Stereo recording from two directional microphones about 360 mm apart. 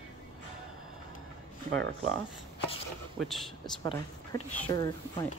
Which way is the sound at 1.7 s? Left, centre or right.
Right.